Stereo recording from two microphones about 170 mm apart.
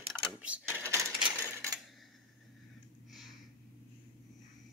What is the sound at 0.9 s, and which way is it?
Cash register, 15° right (ahead or behind).